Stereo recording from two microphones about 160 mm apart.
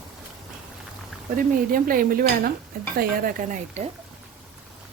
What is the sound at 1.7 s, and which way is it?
A woman's voice, 60° right (ahead or behind).